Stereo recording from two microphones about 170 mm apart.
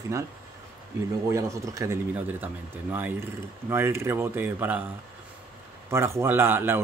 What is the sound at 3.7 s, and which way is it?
Speech, 15° right (ahead or behind).